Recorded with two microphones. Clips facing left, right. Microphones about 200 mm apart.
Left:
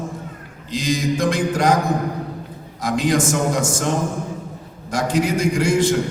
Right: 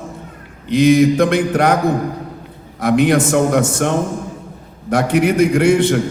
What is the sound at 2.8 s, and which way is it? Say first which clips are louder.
A man's voice: right 6 dB; 60° right (ahead or behind).